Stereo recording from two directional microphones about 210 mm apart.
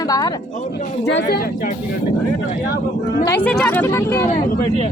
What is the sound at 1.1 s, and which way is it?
Speech, 50° left (ahead or behind).